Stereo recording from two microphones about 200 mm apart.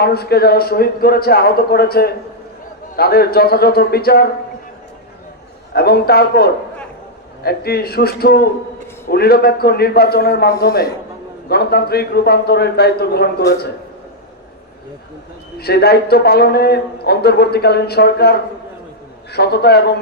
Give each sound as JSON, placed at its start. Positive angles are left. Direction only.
{"t": 0.0, "sound": "a man's voice", "side_deg": 50}
{"t": 5.7, "sound": "a man's voice", "side_deg": 50}
{"t": 15.5, "sound": "a man's voice", "side_deg": 50}
{"t": 19.3, "sound": "a man's voice", "side_deg": 55}